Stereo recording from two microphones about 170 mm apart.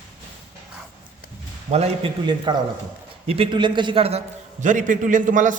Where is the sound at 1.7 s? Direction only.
35° right (ahead or behind).